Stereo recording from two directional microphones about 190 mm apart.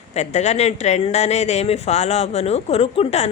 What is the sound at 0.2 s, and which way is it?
Speech, 35° left (ahead or behind).